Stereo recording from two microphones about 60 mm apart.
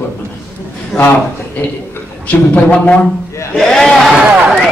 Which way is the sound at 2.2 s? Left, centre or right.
Left.